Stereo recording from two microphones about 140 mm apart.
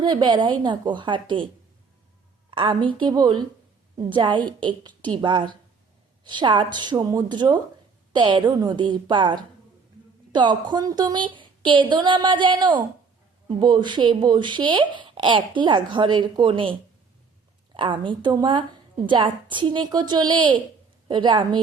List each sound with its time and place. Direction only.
0.0 s speech: 30° right (ahead or behind)
2.5 s speech: 35° right (ahead or behind)
17.7 s speech: 35° right (ahead or behind)